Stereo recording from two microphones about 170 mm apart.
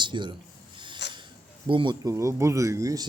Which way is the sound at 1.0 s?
90° left.